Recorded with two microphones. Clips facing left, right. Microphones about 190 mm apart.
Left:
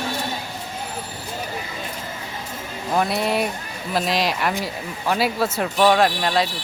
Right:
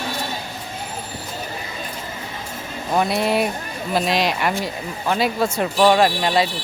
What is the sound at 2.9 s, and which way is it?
Speech, centre (ahead or behind).